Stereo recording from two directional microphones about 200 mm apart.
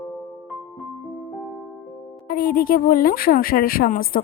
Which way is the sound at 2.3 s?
45° left (ahead or behind).